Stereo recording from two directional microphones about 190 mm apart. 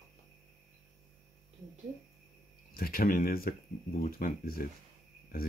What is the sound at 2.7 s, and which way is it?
Speech, 50° left (ahead or behind).